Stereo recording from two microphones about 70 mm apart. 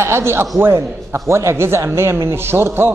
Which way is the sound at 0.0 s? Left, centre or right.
Right.